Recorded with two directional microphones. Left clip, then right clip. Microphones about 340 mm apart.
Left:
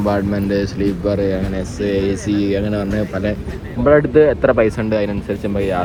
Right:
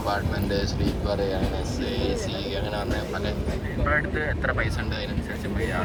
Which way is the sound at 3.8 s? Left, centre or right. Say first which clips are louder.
Left 15 dB; centre.